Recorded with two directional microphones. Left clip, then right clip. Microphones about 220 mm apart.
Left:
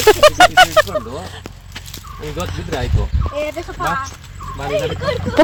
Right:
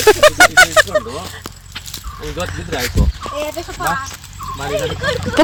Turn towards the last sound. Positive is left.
turn(degrees=5)  # may be behind; listen again after turning